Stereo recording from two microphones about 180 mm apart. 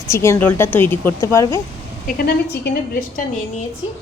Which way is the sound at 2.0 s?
60° left (ahead or behind).